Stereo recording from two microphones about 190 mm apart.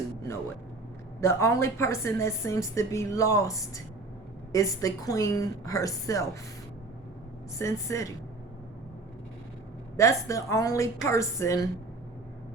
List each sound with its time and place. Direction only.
1.2 s a woman's voice: 15° left (ahead or behind)
7.6 s a woman's voice: 15° left (ahead or behind)
10.0 s a woman's voice: 15° left (ahead or behind)